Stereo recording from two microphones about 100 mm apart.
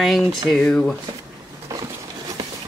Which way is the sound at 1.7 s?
35° right (ahead or behind).